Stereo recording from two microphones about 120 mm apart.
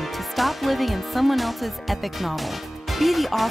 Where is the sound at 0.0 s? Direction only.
Centre (ahead or behind).